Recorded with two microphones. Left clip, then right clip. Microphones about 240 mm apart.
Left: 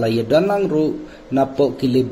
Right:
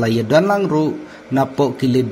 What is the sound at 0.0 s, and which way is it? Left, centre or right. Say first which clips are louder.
A man's voice: right 1 dB; right.